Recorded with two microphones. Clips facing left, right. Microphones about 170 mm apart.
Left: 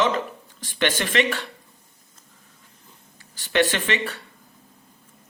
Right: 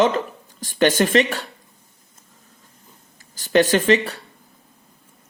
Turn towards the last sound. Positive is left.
turn(degrees=-40)  # may be behind; listen again after turning